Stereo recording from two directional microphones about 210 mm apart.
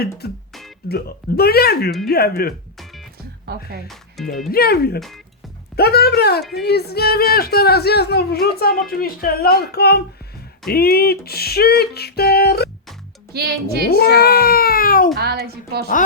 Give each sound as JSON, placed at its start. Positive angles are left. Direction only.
{"t": 0.9, "sound": "music", "side_deg": 50}
{"t": 3.5, "sound": "a woman's voice", "side_deg": -50}
{"t": 4.2, "sound": "speech", "side_deg": 0}
{"t": 4.5, "sound": "music", "side_deg": 45}
{"t": 4.9, "sound": "speech", "side_deg": 0}
{"t": 5.7, "sound": "music", "side_deg": 50}
{"t": 13.3, "sound": "a woman's voice", "side_deg": -50}
{"t": 13.9, "sound": "music", "side_deg": 50}
{"t": 15.2, "sound": "a woman's voice", "side_deg": -50}